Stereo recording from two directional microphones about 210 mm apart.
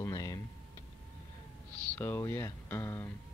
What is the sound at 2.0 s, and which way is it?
Speech, 10° left (ahead or behind).